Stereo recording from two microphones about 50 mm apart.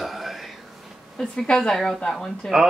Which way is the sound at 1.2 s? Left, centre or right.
Centre.